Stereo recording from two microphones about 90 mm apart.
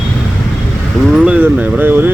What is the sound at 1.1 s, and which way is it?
Speech, 5° right (ahead or behind).